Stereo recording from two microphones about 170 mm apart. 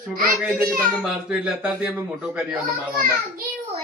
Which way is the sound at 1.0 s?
5° right (ahead or behind).